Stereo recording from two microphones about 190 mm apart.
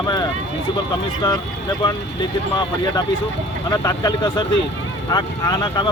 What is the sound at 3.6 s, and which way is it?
Speech, 20° left (ahead or behind).